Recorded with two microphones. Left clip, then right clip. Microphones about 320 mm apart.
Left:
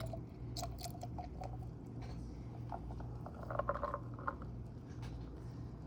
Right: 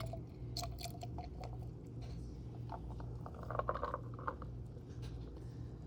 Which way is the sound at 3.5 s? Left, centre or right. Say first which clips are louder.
Left 1 dB; centre.